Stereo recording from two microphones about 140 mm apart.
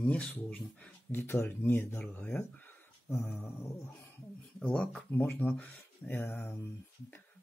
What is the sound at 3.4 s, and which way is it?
Speech, 20° left (ahead or behind).